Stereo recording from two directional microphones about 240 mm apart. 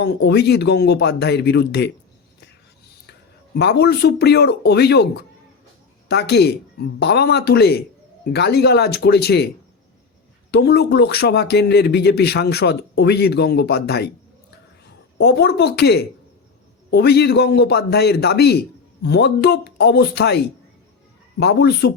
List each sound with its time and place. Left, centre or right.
0.0 s speech: left
3.1 s speech: left
6.1 s speech: left
10.5 s a man's voice: left